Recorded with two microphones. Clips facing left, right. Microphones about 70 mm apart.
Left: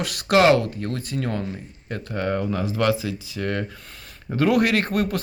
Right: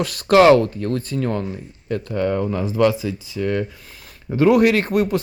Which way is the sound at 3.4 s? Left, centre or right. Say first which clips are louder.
Right 5 dB; left.